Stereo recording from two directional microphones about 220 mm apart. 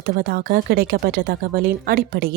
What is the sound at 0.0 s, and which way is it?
Speech, 40° right (ahead or behind).